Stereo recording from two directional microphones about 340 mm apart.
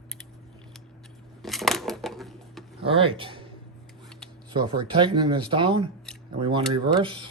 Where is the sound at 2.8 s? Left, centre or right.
Centre.